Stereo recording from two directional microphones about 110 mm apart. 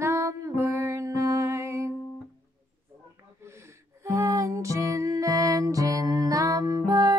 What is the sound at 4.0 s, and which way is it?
Music, 30° right (ahead or behind).